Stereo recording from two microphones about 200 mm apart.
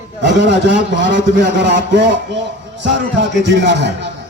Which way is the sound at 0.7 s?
65° right (ahead or behind).